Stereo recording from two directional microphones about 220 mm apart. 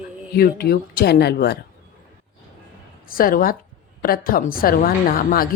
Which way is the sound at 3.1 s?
40° left (ahead or behind).